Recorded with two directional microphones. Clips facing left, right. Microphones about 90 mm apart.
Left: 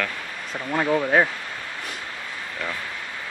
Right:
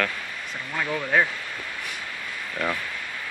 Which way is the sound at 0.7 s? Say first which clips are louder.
Left 4 dB; 25° left (ahead or behind).